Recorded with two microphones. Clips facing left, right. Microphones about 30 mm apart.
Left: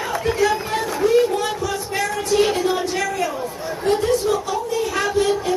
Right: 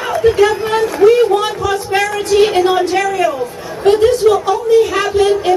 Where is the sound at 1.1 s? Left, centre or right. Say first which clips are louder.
Right 6 dB; right.